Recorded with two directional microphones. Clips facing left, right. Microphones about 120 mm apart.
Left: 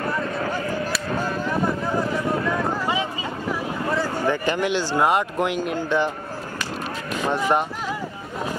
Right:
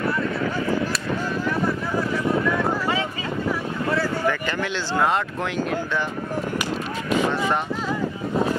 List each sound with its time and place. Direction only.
3.9 s speech: 15° left (ahead or behind)